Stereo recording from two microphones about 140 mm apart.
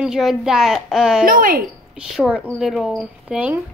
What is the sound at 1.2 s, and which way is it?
Speech, 90° right.